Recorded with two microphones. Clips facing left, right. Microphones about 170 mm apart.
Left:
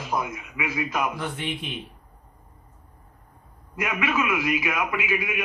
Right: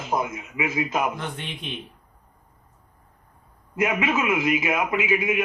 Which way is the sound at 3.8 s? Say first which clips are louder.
Right 3 dB; 25° right (ahead or behind).